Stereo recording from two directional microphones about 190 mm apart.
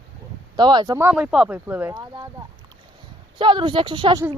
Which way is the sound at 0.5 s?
20° right (ahead or behind).